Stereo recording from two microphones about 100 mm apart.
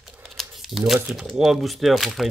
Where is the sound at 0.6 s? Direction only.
Centre (ahead or behind).